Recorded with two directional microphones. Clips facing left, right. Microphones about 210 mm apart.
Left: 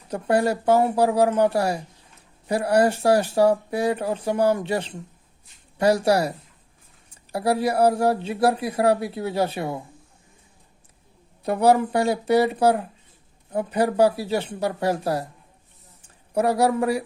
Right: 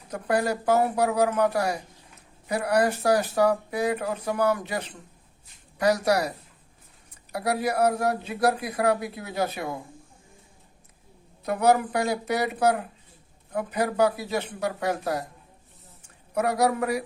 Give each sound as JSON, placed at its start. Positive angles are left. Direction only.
{"t": 0.1, "sound": "speech", "side_deg": 30}
{"t": 11.4, "sound": "speech", "side_deg": 30}
{"t": 16.3, "sound": "speech", "side_deg": 30}